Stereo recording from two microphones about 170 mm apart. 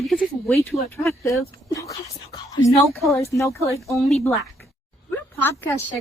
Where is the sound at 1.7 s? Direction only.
20° left (ahead or behind).